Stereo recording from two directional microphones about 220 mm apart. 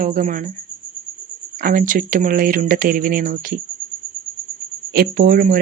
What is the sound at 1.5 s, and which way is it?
Speech, 40° right (ahead or behind).